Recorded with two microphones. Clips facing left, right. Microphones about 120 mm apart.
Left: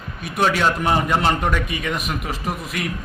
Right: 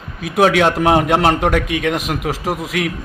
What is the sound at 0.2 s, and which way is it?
A man's voice, 85° right.